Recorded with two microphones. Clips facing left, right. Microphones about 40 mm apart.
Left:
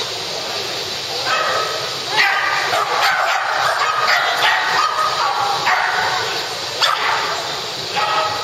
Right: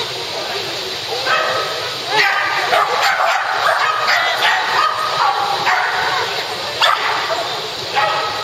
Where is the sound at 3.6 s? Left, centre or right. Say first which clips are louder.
Right 5 dB; centre.